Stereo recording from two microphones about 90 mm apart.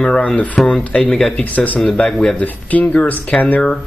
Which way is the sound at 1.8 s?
5° left (ahead or behind).